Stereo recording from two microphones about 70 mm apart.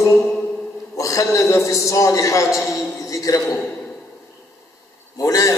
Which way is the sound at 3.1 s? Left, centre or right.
Left.